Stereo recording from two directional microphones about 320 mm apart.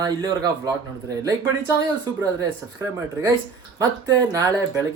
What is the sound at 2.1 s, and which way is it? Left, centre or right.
Speech, centre.